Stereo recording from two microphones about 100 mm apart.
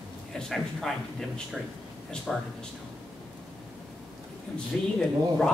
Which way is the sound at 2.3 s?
5° left (ahead or behind).